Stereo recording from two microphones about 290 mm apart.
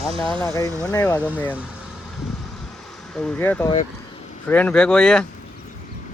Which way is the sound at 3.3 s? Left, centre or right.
Centre.